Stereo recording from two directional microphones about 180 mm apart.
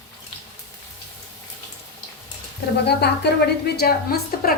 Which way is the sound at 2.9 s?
65° left (ahead or behind).